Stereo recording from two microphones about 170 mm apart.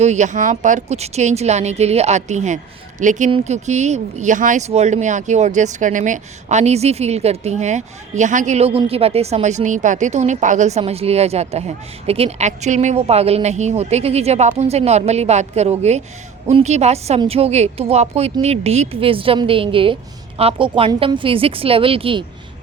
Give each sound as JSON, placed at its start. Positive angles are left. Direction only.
{"t": 0.0, "sound": "speech", "side_deg": -45}